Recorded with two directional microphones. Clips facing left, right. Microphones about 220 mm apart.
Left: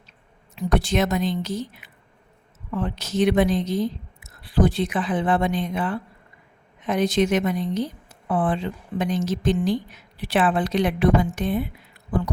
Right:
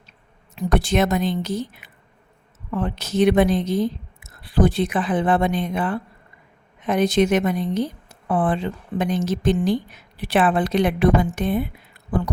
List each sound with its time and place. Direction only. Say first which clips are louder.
0.5 s a woman's voice: right 2 dB; 55° right (ahead or behind)